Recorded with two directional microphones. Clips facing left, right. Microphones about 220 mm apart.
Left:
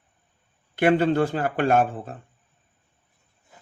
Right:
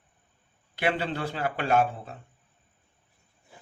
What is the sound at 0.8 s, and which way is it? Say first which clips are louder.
Speech: left 9 dB; 50° left (ahead or behind).